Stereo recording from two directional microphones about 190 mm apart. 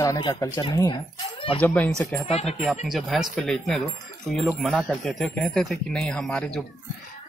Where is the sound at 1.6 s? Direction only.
10° left (ahead or behind).